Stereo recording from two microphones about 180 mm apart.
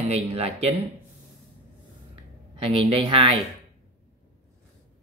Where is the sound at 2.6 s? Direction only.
35° right (ahead or behind).